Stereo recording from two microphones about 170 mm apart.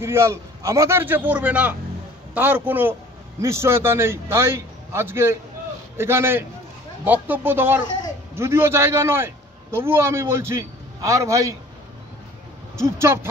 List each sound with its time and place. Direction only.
0.0 s a man's voice: 15° right (ahead or behind)
7.8 s speech: 25° left (ahead or behind)
8.4 s a man's voice: 15° right (ahead or behind)
12.7 s a man's voice: 15° right (ahead or behind)